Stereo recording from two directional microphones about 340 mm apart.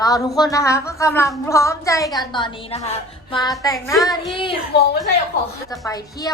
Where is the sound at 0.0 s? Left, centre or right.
Centre.